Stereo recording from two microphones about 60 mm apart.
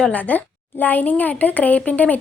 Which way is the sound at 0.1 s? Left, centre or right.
Left.